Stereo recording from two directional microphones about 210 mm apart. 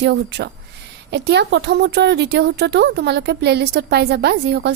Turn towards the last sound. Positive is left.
turn(degrees=-55)  # may be behind; listen again after turning